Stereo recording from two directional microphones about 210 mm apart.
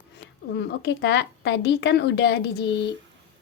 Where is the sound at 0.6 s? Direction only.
55° left (ahead or behind).